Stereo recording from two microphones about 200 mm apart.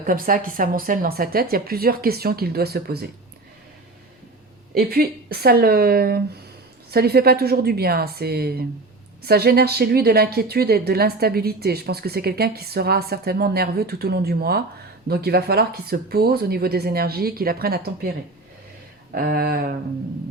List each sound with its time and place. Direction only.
0.0 s a woman's voice: 45° right (ahead or behind)
4.7 s a woman's voice: 50° right (ahead or behind)
19.1 s a woman's voice: 50° right (ahead or behind)